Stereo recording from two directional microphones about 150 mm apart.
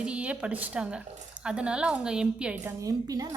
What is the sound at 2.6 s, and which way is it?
Speech, 25° right (ahead or behind).